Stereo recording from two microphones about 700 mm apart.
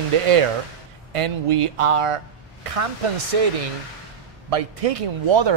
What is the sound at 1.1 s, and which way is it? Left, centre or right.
Speech, right.